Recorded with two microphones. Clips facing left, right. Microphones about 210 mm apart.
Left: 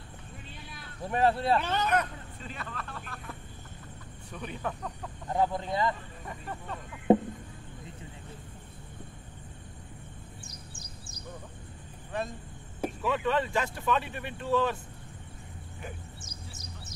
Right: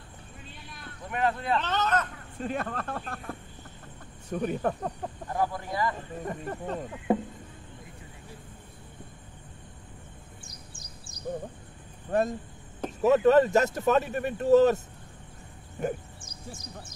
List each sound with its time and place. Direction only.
1.0 s speech: 30° left (ahead or behind)
1.6 s speech: 10° left (ahead or behind)
2.3 s speech: 50° right (ahead or behind)
5.3 s speech: 20° left (ahead or behind)
6.2 s speech: 45° right (ahead or behind)
12.1 s speech: 45° right (ahead or behind)
15.8 s speech: 45° right (ahead or behind)